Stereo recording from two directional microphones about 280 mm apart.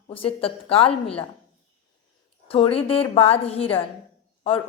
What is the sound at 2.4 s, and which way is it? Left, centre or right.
Speech, centre.